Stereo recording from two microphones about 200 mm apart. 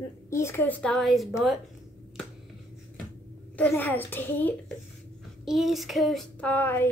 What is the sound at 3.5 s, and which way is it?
A child's voice, 10° left (ahead or behind).